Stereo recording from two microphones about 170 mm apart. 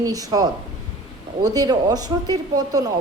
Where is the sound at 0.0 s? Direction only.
20° right (ahead or behind).